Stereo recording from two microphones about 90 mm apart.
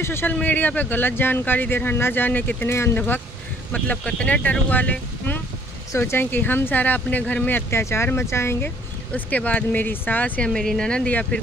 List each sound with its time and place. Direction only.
0.0 s speech: 25° left (ahead or behind)
3.7 s speech: 15° left (ahead or behind)
10.5 s speech: 5° left (ahead or behind)